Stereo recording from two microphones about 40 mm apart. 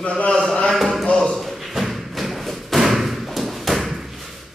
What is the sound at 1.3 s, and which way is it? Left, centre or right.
Thump, centre.